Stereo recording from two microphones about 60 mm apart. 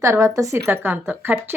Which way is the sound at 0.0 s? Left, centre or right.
Right.